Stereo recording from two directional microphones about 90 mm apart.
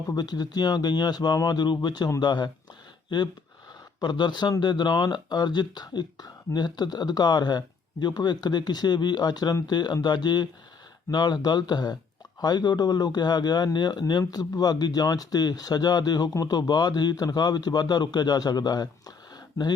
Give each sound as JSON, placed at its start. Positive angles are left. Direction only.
{"t": 0.1, "sound": "speech", "side_deg": 50}
{"t": 4.0, "sound": "speech", "side_deg": 55}